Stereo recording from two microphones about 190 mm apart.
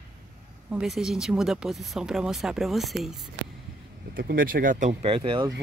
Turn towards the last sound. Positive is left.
turn(degrees=-25)  # may be behind; listen again after turning